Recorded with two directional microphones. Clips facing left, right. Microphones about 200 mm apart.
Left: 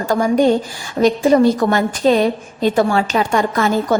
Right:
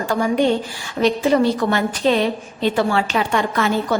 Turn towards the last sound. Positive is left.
turn(degrees=40)  # may be behind; listen again after turning